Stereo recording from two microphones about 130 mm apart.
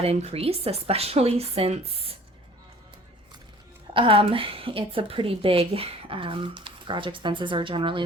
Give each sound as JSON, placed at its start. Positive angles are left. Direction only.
{"t": 0.0, "sound": "a woman's voice", "side_deg": -50}
{"t": 3.9, "sound": "a woman's voice", "side_deg": -40}